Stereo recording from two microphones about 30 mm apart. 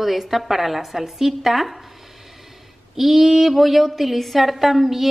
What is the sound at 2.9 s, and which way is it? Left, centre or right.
Speech, centre.